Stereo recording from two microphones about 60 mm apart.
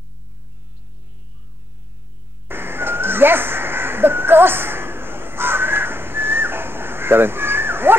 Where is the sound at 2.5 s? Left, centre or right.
Right.